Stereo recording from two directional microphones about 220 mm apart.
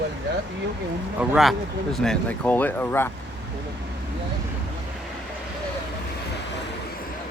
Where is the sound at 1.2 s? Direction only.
Centre (ahead or behind).